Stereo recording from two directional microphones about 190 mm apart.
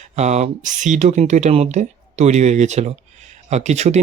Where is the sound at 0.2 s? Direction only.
35° right (ahead or behind).